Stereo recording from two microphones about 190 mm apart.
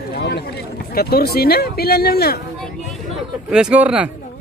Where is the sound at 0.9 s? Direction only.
55° left (ahead or behind).